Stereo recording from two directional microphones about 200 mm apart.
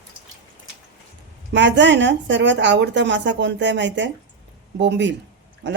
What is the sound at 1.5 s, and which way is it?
Speech, 60° right (ahead or behind).